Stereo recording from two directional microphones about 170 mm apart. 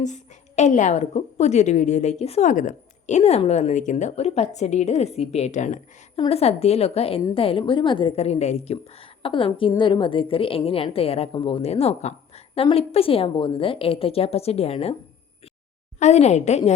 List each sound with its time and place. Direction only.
0.0 s a woman's voice: 45° left (ahead or behind)
6.1 s a woman's voice: 35° left (ahead or behind)
16.0 s a woman's voice: 40° left (ahead or behind)